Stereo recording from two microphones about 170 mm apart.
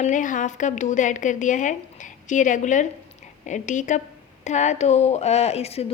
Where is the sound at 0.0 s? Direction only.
50° left (ahead or behind).